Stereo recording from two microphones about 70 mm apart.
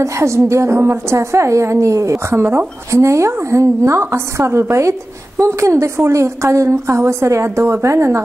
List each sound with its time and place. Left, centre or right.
0.0 s a woman's voice: right
2.1 s a woman's voice: right